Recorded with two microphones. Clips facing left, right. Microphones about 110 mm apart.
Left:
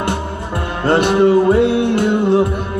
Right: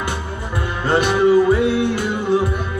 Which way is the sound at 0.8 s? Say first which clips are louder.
Left 3 dB; 65° left (ahead or behind).